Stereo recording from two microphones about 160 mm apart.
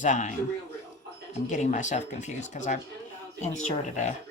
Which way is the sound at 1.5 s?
50° left (ahead or behind).